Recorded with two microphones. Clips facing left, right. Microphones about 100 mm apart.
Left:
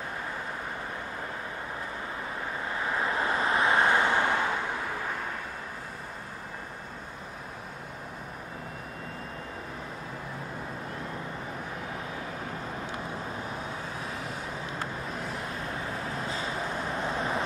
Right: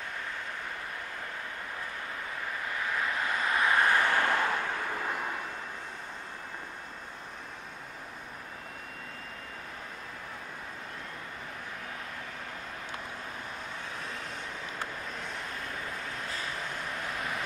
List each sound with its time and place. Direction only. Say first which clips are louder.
2.7 s vehicle: left 3 dB; 25° left (ahead or behind); by 5.2 s centre (ahead or behind)
14.0 s vehicle: left 4 dB; 5° left (ahead or behind)
16.2 s vehicle: left 5 dB; 25° left (ahead or behind)